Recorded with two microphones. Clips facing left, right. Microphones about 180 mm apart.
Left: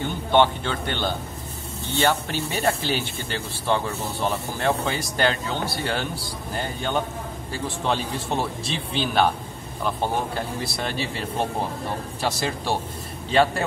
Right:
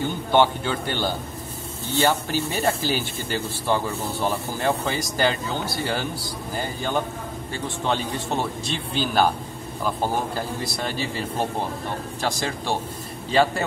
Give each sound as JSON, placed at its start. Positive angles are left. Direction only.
{"t": 0.3, "sound": "speech", "side_deg": -5}